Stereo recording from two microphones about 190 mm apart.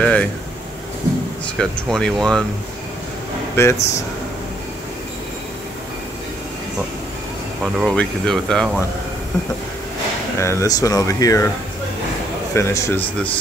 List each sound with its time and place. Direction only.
0.0 s a sound: 10° left (ahead or behind)
1.6 s speech: 5° left (ahead or behind)
3.6 s speech: 15° left (ahead or behind)
7.6 s speech: 5° left (ahead or behind)
10.4 s speech: 15° left (ahead or behind)
12.5 s speech: 15° left (ahead or behind)